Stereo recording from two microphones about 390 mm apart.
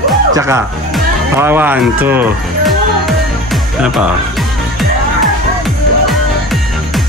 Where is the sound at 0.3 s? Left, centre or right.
Centre.